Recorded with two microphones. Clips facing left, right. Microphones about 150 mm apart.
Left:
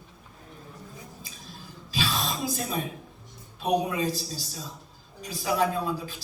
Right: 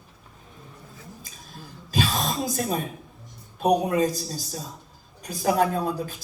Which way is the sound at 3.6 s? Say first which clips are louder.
Right 5 dB; 45° right (ahead or behind).